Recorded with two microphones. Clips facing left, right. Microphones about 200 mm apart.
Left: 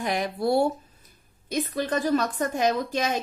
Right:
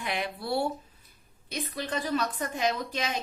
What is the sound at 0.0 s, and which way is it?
A woman's voice, 40° left (ahead or behind).